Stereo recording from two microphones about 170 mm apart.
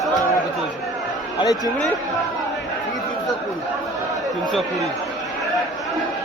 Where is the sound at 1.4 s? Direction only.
20° left (ahead or behind).